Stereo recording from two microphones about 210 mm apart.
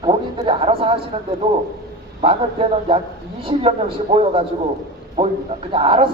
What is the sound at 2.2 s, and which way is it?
Speech, 25° right (ahead or behind).